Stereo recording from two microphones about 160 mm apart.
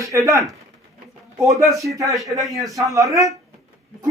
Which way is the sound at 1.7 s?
Centre (ahead or behind).